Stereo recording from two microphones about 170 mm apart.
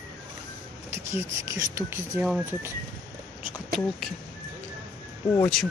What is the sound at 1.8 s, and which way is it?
Speech, 15° right (ahead or behind).